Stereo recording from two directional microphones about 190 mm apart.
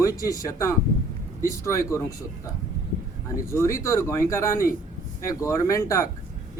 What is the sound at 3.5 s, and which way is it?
Speech, 15° left (ahead or behind).